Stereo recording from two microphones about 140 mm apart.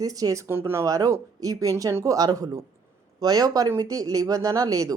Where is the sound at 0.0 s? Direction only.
25° right (ahead or behind).